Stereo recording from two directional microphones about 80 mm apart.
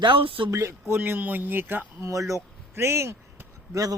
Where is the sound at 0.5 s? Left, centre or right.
Right.